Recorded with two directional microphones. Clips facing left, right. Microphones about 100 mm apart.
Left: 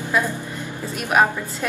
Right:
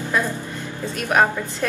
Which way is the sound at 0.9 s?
15° left (ahead or behind).